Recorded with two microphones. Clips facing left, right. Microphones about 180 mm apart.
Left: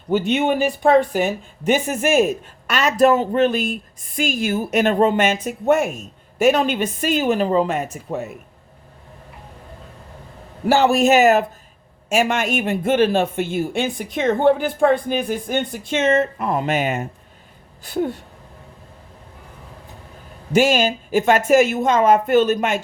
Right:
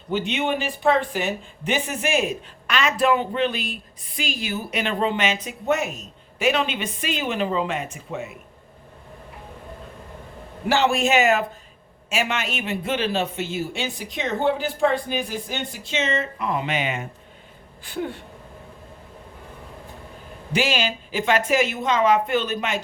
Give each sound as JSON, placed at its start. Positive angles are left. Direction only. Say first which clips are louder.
{"t": 0.1, "sound": "speech", "louder": "left 6 dB", "side_deg": 45}
{"t": 10.7, "sound": "a man's voice", "louder": "left 5 dB", "side_deg": 40}
{"t": 20.5, "sound": "speech", "louder": "left 7 dB", "side_deg": 45}